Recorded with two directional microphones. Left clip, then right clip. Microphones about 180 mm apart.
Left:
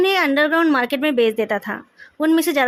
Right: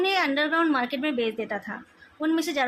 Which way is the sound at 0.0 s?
65° left (ahead or behind).